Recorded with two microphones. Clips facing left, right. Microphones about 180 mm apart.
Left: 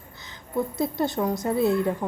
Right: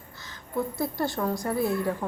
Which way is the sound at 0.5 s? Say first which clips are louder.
Left 3 dB; 20° left (ahead or behind).